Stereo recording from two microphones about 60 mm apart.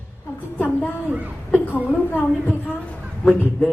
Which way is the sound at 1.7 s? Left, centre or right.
Left.